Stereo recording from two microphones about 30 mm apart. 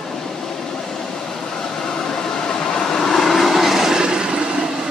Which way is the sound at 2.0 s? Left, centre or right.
Centre.